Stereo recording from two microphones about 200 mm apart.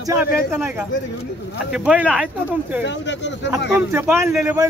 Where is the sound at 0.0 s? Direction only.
10° right (ahead or behind).